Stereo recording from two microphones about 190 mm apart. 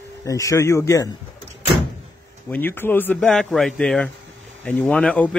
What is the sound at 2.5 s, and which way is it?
Speech, 10° left (ahead or behind).